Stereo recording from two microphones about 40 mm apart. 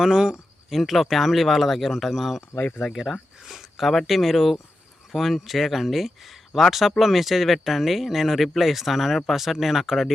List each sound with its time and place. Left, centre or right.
0.0 s speech: centre
0.7 s speech: centre
2.6 s speech: left
2.9 s speech: centre